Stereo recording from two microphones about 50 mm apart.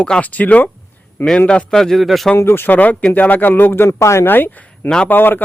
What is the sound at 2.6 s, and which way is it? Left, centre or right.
Speech, left.